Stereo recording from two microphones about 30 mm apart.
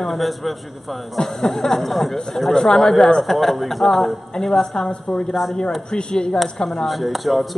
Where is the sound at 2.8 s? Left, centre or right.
Left.